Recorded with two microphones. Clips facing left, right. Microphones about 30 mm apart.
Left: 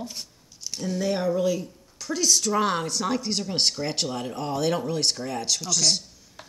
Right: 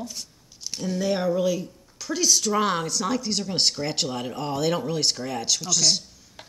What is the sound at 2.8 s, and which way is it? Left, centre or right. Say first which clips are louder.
Speech: right 1 dB; centre.